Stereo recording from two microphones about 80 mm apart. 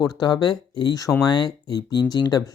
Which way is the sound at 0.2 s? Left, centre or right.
Left.